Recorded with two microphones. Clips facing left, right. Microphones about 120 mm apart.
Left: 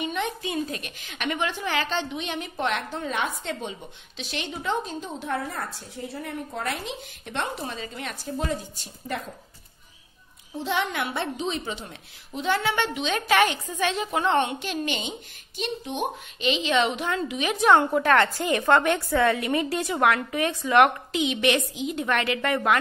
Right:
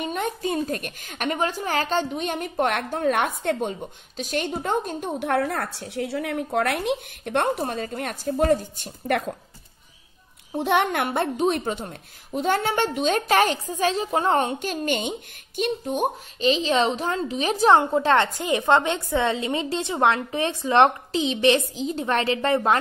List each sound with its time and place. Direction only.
0.0 s a woman's voice: 45° right (ahead or behind)
10.5 s a woman's voice: 60° right (ahead or behind); by 22.8 s 30° right (ahead or behind)